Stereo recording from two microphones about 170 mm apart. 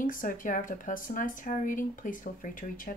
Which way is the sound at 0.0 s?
55° left (ahead or behind).